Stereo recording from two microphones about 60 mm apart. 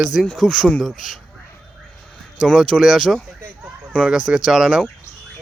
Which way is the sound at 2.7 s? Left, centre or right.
Centre.